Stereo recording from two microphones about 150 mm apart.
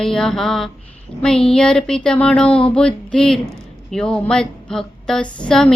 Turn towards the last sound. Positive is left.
turn(degrees=5)  # may be behind; listen again after turning